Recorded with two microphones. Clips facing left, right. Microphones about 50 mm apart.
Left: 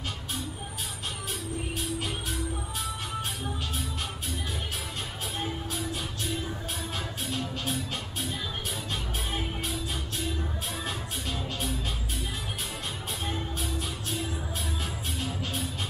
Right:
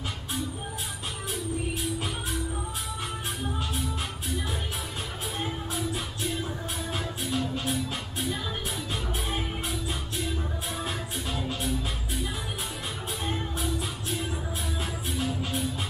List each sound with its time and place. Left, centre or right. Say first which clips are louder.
7.2 s music: right 4 dB; right
10.8 s music: right 2 dB; right
13.2 s music: right 3 dB; right
15.1 s music: right 5 dB; right